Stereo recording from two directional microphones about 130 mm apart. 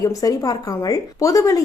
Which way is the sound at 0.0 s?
25° left (ahead or behind).